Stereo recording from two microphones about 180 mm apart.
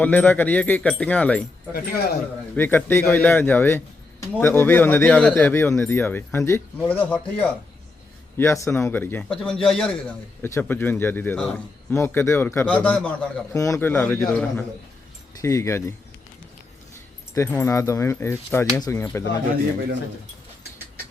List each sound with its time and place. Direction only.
0.0 s speech: 10° left (ahead or behind)
1.7 s speech: 60° left (ahead or behind)
2.6 s speech: 10° left (ahead or behind)
13.5 s speech: 15° left (ahead or behind)
17.3 s speech: 15° left (ahead or behind)